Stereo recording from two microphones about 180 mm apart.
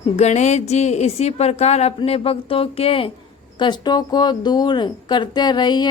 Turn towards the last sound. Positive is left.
turn(degrees=25)  # may be behind; listen again after turning